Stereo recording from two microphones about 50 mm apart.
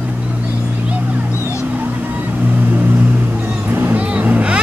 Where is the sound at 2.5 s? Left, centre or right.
Right.